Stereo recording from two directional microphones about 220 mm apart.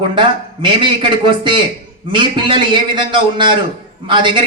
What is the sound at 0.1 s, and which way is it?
A man's voice, 20° right (ahead or behind).